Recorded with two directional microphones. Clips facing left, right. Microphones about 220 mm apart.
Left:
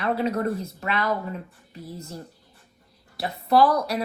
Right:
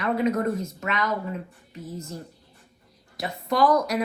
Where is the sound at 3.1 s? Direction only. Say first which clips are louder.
Left 5 dB; 35° left (ahead or behind).